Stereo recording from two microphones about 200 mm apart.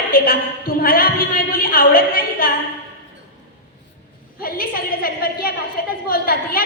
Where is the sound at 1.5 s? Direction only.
45° left (ahead or behind).